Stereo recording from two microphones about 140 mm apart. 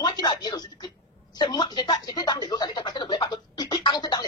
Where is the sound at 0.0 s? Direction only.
30° left (ahead or behind).